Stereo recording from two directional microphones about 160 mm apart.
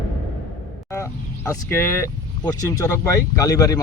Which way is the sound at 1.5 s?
15° left (ahead or behind).